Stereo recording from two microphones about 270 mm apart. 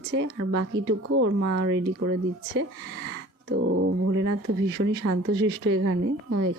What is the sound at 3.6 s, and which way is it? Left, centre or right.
Speech, right.